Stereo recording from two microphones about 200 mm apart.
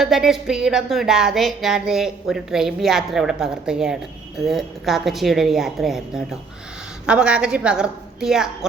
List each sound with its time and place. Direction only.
0.0 s music: centre (ahead or behind)